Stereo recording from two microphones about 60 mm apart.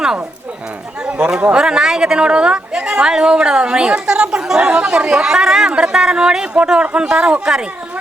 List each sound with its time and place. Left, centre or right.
1.0 s speech: right
1.6 s a woman's voice: centre